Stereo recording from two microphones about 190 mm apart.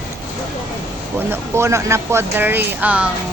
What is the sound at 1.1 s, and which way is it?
Speech, 15° right (ahead or behind).